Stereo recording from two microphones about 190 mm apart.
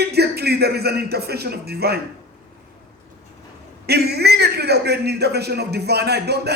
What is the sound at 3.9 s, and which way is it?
A man's voice, 60° right (ahead or behind).